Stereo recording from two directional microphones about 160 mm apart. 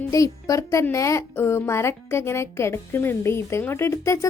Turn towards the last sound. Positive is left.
turn(degrees=20)  # may be behind; listen again after turning